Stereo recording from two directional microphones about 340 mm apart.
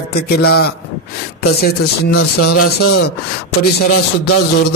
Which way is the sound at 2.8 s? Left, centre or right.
Left.